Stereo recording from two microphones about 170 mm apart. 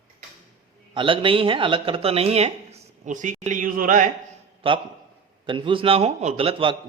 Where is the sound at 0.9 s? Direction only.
30° right (ahead or behind); by 4.1 s 50° right (ahead or behind).